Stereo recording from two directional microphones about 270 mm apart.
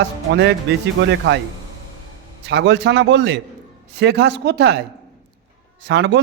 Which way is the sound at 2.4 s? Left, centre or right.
Right.